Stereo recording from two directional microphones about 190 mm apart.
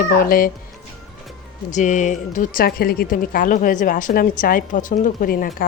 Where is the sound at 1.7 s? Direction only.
40° left (ahead or behind).